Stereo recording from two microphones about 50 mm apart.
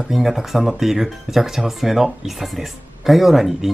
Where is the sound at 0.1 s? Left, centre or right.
Centre.